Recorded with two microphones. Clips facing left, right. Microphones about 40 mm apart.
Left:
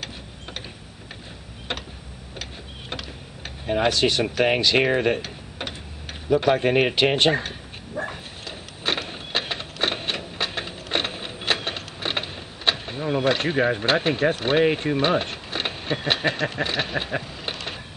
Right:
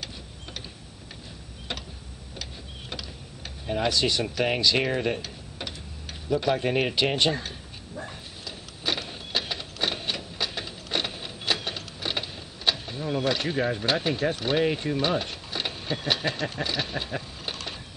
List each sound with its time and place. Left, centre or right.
1.7 s a sound: left
3.6 s speech: left
6.2 s bow-wow: left